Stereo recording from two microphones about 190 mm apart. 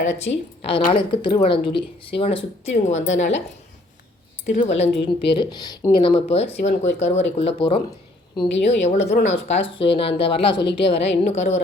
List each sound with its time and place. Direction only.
0.0 s a woman's voice: 35° left (ahead or behind)
0.9 s speech: 25° left (ahead or behind)
4.4 s a woman's voice: 35° left (ahead or behind)